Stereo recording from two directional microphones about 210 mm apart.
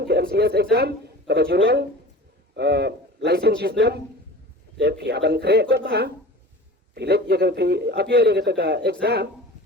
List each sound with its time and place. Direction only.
0.0 s a man's voice: 50° right (ahead or behind)